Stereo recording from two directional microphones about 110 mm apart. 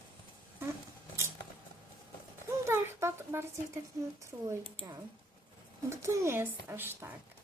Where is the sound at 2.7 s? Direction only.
25° right (ahead or behind).